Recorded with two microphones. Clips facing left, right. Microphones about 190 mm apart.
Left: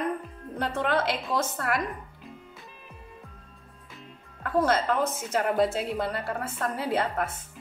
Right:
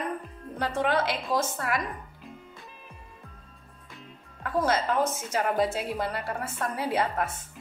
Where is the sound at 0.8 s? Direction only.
55° left (ahead or behind).